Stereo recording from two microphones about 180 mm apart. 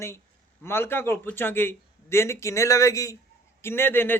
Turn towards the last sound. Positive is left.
turn(degrees=10)  # may be behind; listen again after turning